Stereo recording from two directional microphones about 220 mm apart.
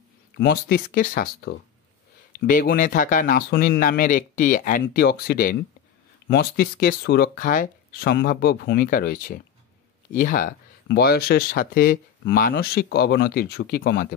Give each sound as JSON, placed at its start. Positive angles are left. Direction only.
{"t": 0.4, "sound": "speech", "side_deg": 45}